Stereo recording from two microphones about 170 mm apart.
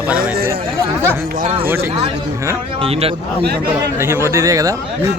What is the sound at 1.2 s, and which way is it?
Speech, 60° right (ahead or behind).